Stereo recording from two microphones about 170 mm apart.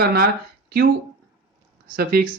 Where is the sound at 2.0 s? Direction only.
60° right (ahead or behind).